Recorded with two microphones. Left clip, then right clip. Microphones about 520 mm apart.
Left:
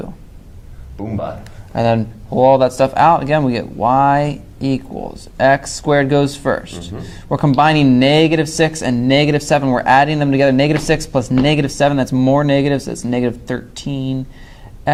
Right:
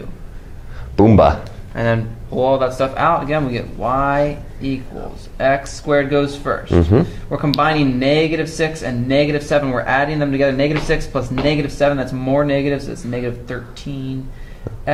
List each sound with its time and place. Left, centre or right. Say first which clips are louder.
0.9 s speech: right 14 dB; right
1.7 s a man's voice: left 3 dB; left